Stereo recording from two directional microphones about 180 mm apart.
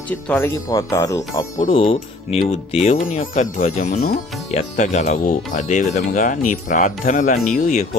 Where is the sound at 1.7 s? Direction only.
30° left (ahead or behind).